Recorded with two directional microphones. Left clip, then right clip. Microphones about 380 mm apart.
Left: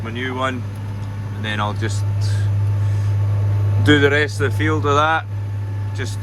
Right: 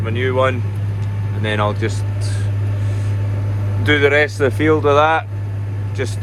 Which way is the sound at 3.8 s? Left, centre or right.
Centre.